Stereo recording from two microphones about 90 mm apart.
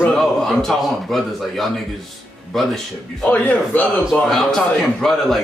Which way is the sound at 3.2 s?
15° left (ahead or behind).